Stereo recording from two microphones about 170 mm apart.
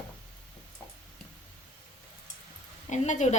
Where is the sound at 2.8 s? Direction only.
45° left (ahead or behind).